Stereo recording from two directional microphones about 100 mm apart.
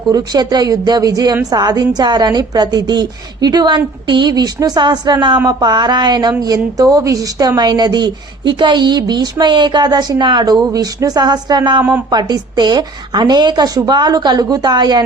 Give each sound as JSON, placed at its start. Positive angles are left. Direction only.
{"t": 0.1, "sound": "a woman's voice", "side_deg": -45}
{"t": 11.8, "sound": "a woman's voice", "side_deg": -20}
{"t": 12.1, "sound": "speech", "side_deg": -45}